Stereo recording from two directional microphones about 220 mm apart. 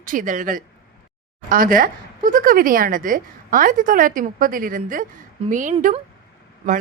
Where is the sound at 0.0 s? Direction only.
35° right (ahead or behind).